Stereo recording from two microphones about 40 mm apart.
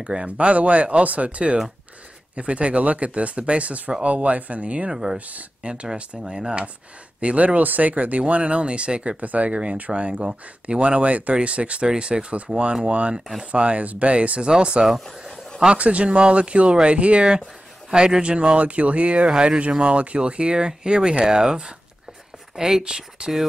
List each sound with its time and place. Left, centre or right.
0.0 s speech: right
4.9 s speech: centre
7.2 s speech: right
9.2 s speech: right
14.9 s speech: centre
15.6 s speech: right
17.2 s speech: centre
18.6 s speech: right; by 22.9 s centre
22.9 s speech: right